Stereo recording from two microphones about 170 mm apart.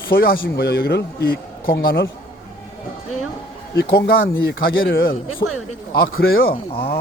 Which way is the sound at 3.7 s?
70° left (ahead or behind).